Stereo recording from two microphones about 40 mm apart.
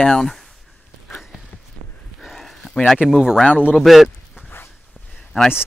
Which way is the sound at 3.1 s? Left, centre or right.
Centre.